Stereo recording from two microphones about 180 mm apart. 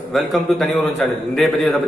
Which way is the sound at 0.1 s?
Centre (ahead or behind).